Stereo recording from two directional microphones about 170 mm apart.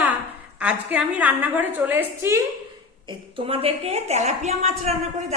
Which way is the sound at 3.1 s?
30° right (ahead or behind).